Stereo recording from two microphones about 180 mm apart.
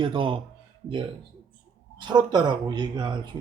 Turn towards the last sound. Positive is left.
turn(degrees=-25)  # may be behind; listen again after turning